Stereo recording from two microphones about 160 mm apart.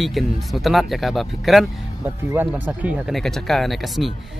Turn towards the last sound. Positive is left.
turn(degrees=0)  # may be behind; listen again after turning